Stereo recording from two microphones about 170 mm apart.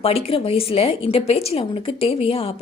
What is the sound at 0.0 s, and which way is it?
A woman's voice, 35° left (ahead or behind).